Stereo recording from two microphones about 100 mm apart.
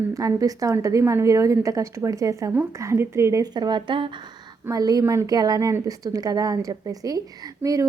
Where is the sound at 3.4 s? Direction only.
45° right (ahead or behind).